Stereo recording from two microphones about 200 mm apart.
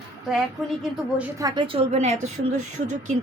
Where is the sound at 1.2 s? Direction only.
15° right (ahead or behind).